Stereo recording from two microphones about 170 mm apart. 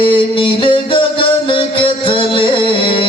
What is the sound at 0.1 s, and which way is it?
Music, 30° left (ahead or behind).